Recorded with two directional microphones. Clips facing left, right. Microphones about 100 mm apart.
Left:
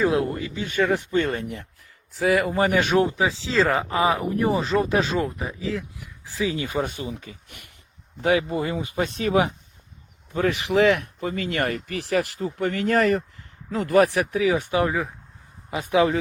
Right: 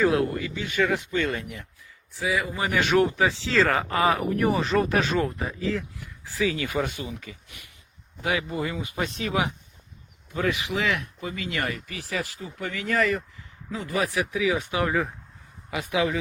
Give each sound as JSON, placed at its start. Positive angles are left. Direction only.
{"t": 0.0, "sound": "speech", "side_deg": 25}
{"t": 2.1, "sound": "speech", "side_deg": 70}
{"t": 2.6, "sound": "speech", "side_deg": 30}
{"t": 5.4, "sound": "speech", "side_deg": 10}
{"t": 6.0, "sound": "speech", "side_deg": 20}
{"t": 10.7, "sound": "speech", "side_deg": 50}
{"t": 14.4, "sound": "speech", "side_deg": 35}